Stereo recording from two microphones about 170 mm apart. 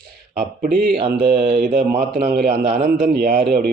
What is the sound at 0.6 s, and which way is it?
A man's voice, 60° right (ahead or behind).